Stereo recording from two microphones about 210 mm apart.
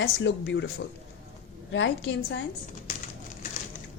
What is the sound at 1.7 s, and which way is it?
Speech, 60° left (ahead or behind).